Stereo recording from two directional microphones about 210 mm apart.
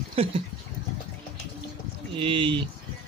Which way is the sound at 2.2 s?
25° right (ahead or behind).